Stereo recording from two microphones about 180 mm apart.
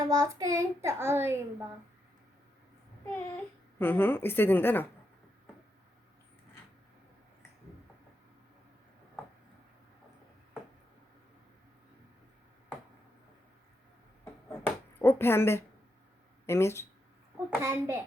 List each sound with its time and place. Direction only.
0.0 s a child's voice: 20° right (ahead or behind)
3.1 s speech: 10° left (ahead or behind)
14.5 s bouncing: 10° left (ahead or behind)
16.5 s speech: 15° left (ahead or behind)
17.6 s a child's voice: 15° right (ahead or behind)